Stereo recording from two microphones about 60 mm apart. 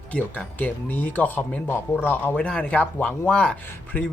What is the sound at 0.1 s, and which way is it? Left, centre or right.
Speech, left.